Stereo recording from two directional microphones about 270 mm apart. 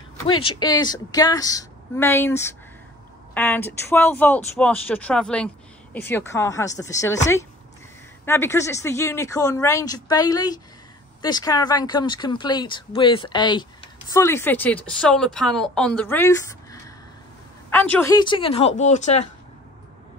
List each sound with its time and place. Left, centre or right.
0.3 s speech: centre
8.3 s speech: centre; by 19.2 s left